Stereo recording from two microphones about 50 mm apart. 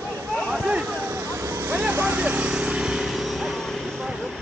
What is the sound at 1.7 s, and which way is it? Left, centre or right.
Speech, right.